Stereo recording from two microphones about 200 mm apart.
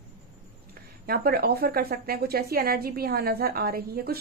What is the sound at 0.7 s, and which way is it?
Speech, 50° right (ahead or behind).